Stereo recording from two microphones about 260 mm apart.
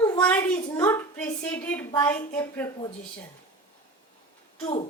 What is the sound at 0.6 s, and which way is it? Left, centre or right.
A woman's voice, centre.